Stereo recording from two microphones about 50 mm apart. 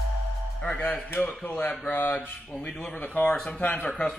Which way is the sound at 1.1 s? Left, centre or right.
Left.